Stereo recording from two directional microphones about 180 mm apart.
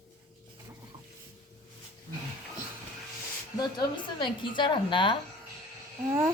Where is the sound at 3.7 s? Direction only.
25° left (ahead or behind).